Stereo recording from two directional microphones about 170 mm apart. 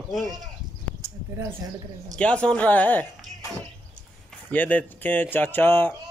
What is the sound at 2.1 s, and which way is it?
Speech, 5° left (ahead or behind).